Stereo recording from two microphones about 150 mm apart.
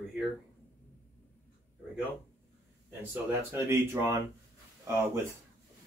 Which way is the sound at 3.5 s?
15° right (ahead or behind).